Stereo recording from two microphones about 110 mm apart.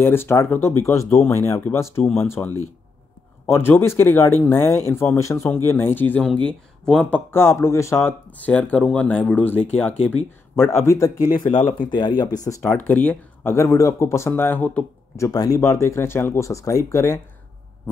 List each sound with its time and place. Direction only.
0.0 s speech: 20° left (ahead or behind)
8.3 s speech: 15° left (ahead or behind)
11.5 s speech: 45° left (ahead or behind)
12.4 s speech: 20° left (ahead or behind)
13.6 s speech: 25° left (ahead or behind)
15.1 s speech: 30° left (ahead or behind)